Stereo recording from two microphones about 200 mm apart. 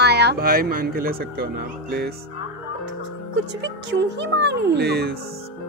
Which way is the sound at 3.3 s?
60° right (ahead or behind).